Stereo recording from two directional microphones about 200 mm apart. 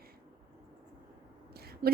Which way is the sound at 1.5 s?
50° right (ahead or behind).